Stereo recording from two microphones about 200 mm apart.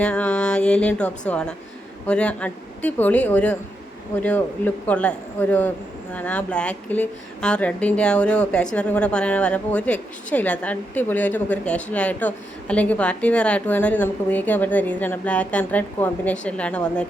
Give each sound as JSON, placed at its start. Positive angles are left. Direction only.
{"t": 0.0, "sound": "speech", "side_deg": 5}